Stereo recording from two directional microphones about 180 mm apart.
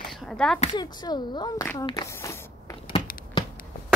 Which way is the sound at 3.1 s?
50° left (ahead or behind).